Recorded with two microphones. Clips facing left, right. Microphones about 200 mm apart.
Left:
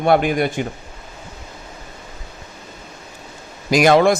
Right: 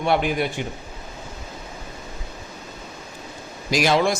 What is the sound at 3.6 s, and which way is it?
Speech, 55° left (ahead or behind).